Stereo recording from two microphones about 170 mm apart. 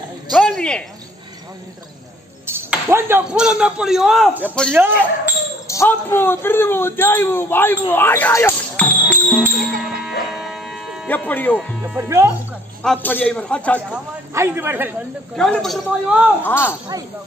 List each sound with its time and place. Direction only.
0.3 s a sound: 5° left (ahead or behind)
2.4 s speech: 15° right (ahead or behind)
5.7 s a man's voice: 15° left (ahead or behind)
9.8 s a sound: centre (ahead or behind)
11.1 s a man's voice: 10° left (ahead or behind)
12.0 s speech: 15° right (ahead or behind)
12.8 s a man's voice: 10° left (ahead or behind)
13.9 s speech: 15° right (ahead or behind)
15.3 s a man's voice: centre (ahead or behind)